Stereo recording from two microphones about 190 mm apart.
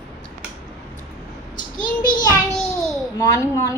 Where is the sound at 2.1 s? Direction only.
45° left (ahead or behind).